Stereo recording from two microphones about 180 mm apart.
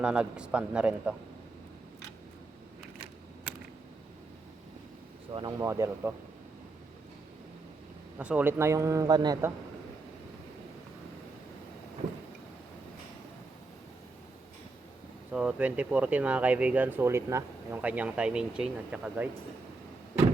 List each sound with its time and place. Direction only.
0.0 s speech: 5° right (ahead or behind)
5.3 s speech: 25° right (ahead or behind)
8.2 s speech: 10° right (ahead or behind)
15.3 s speech: 5° right (ahead or behind)